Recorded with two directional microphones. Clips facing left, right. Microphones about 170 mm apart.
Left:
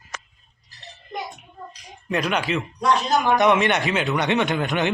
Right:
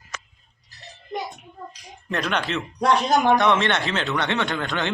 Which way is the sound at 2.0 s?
5° left (ahead or behind).